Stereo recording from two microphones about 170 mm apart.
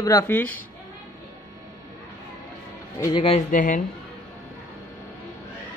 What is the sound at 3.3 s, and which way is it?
Speech, 50° left (ahead or behind).